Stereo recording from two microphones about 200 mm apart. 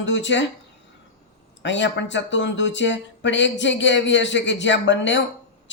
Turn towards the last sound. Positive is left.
turn(degrees=65)  # may be behind; listen again after turning